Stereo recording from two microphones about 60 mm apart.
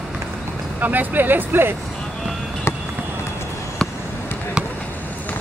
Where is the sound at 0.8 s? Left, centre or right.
Right.